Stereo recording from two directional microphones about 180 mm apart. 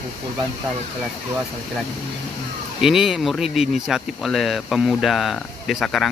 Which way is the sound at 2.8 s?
Centre (ahead or behind).